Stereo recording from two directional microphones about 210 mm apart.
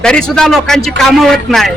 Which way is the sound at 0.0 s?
5° left (ahead or behind).